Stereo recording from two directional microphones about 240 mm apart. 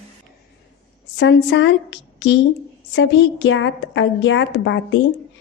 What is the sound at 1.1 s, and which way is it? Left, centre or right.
A woman's voice, left.